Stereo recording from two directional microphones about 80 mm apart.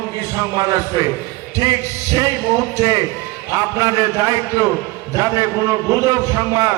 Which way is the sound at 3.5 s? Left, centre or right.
Right.